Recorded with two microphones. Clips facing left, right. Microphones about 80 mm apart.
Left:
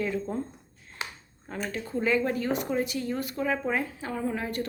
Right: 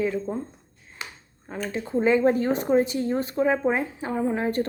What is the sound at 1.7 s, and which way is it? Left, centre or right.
Speech, right.